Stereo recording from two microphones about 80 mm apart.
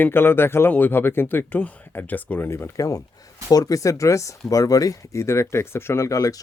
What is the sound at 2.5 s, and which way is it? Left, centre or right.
Speech, left.